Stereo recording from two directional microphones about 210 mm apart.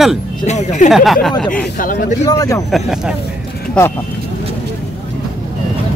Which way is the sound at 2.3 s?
15° left (ahead or behind).